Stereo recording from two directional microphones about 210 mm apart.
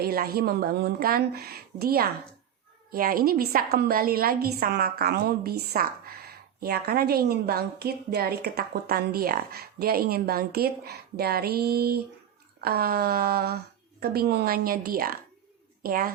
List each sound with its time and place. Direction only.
0.0 s a woman's voice: 45° right (ahead or behind)